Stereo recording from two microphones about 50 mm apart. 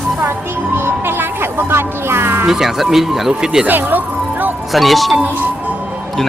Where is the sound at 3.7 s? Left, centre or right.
Right.